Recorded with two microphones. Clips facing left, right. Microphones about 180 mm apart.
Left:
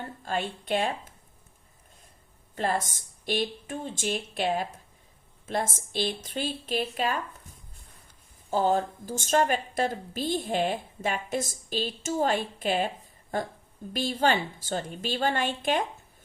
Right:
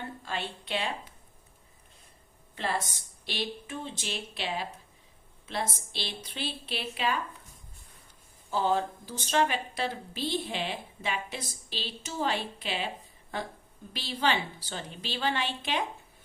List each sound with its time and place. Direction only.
0.3 s a woman's voice: 45° left (ahead or behind)
2.6 s a woman's voice: 45° left (ahead or behind)
8.4 s a woman's voice: 45° left (ahead or behind)